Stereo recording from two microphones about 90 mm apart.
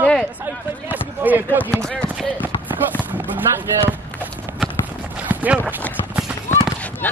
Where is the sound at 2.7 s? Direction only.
20° right (ahead or behind).